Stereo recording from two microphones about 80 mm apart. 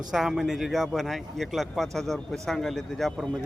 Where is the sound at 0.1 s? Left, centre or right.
Centre.